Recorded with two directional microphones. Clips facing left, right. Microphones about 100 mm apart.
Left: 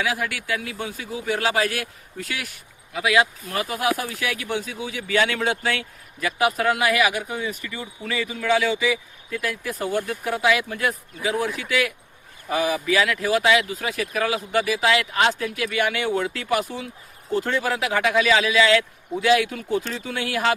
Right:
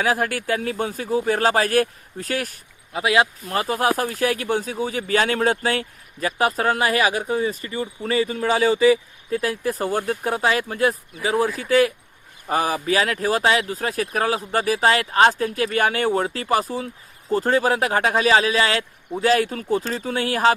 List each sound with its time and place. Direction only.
0.0 s speech: 40° right (ahead or behind)
2.9 s speech: 30° right (ahead or behind)